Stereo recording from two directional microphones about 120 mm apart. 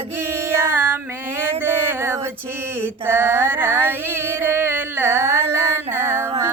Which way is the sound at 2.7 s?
20° right (ahead or behind).